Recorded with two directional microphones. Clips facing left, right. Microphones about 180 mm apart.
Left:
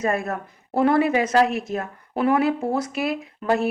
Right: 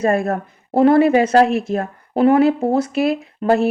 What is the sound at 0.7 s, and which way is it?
Speech, 25° right (ahead or behind).